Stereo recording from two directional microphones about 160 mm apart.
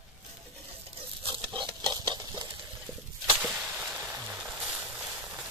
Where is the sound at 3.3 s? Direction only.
5° right (ahead or behind).